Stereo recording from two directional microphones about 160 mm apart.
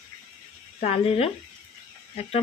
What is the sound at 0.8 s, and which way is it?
Speech, 40° left (ahead or behind).